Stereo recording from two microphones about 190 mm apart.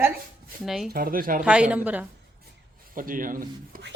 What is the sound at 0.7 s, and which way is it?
Speech, centre (ahead or behind).